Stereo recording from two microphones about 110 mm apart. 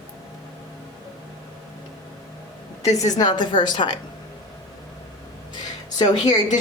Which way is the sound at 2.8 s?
35° left (ahead or behind).